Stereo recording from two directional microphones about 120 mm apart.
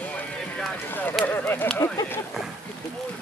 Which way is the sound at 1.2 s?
15° left (ahead or behind).